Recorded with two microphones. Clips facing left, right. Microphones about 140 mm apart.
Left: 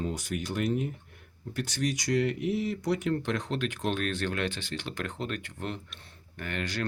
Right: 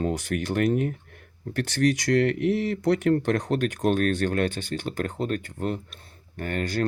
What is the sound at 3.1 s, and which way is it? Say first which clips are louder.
Speech: right 7 dB; 45° right (ahead or behind).